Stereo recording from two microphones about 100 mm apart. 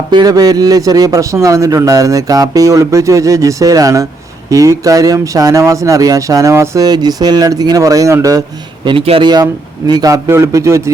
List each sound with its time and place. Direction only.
0.1 s a man's voice: 45° right (ahead or behind)
6.8 s a man's voice: 40° right (ahead or behind)
8.8 s speech: 55° right (ahead or behind)
9.2 s a man's voice: 45° right (ahead or behind)
10.2 s a man's voice: 25° right (ahead or behind)